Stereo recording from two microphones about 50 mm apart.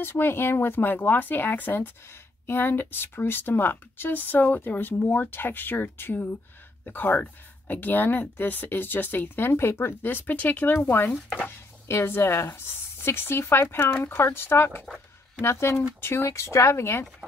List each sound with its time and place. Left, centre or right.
0.0 s speech: left
11.9 s speech: left
15.4 s speech: left
16.3 s speech: left